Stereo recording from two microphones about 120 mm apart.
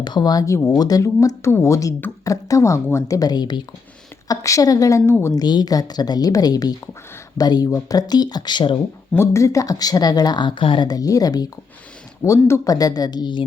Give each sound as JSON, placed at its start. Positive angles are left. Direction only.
{"t": 0.0, "sound": "speech", "side_deg": 35}
{"t": 5.3, "sound": "speech", "side_deg": 35}
{"t": 9.1, "sound": "speech", "side_deg": 25}